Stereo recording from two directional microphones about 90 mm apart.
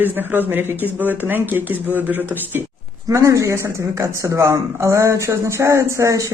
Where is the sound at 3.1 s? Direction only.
35° right (ahead or behind).